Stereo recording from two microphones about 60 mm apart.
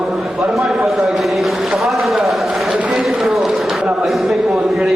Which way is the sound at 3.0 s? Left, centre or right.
Centre.